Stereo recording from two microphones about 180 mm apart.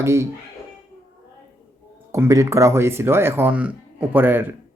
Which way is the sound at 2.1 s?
15° right (ahead or behind).